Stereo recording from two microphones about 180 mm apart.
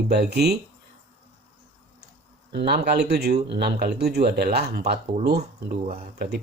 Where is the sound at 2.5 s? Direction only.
65° right (ahead or behind).